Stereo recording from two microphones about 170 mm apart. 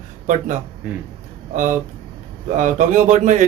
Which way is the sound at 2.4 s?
50° right (ahead or behind).